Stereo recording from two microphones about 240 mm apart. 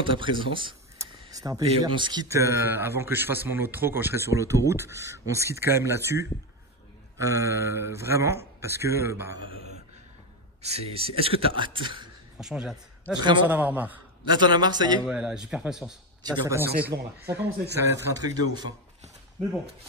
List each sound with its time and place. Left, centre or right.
0.0 s a sound: right
1.8 s a man's voice: centre
10.6 s speech: right
12.4 s a man's voice: centre
14.2 s a man's voice: centre
15.0 s a man's voice: centre